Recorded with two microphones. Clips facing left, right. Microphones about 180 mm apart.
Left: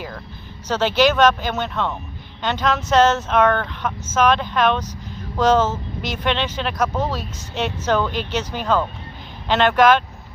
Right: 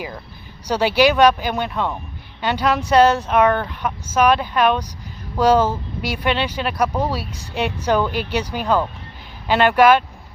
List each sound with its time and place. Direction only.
0.7 s speech: 10° right (ahead or behind)